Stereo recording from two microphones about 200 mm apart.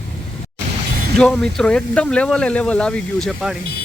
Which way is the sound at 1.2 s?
5° left (ahead or behind).